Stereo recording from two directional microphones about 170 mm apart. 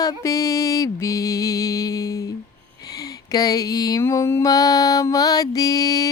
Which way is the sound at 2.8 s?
20° left (ahead or behind).